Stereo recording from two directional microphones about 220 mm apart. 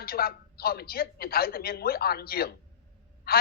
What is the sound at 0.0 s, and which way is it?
A man's voice, 45° left (ahead or behind).